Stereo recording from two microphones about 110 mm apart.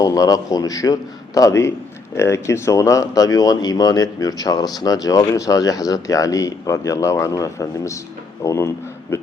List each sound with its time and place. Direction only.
0.0 s speech: 30° left (ahead or behind)